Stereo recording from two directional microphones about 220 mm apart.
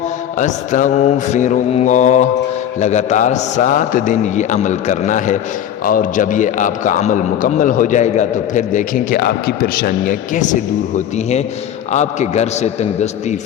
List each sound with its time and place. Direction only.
0.3 s a man's voice: 35° left (ahead or behind)
11.9 s a man's voice: 30° left (ahead or behind)